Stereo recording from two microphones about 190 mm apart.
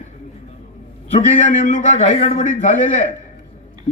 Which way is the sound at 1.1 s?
40° left (ahead or behind).